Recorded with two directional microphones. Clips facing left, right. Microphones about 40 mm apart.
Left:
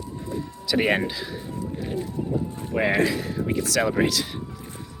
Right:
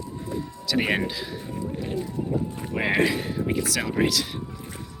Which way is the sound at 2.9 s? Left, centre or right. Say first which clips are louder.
Even; right.